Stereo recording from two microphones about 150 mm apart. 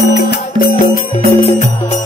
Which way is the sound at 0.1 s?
90° left.